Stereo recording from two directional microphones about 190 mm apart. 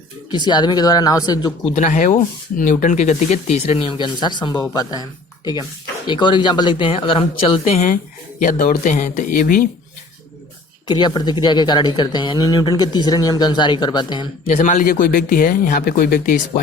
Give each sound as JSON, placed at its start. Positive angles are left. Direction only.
{"t": 0.3, "sound": "speech", "side_deg": 25}
{"t": 1.7, "sound": "speech", "side_deg": 40}
{"t": 6.1, "sound": "speech", "side_deg": 25}
{"t": 8.4, "sound": "speech", "side_deg": 40}
{"t": 10.8, "sound": "speech", "side_deg": 25}
{"t": 14.6, "sound": "speech", "side_deg": 40}